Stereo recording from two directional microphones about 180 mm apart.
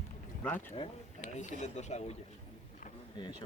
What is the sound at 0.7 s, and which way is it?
Speech, 40° left (ahead or behind).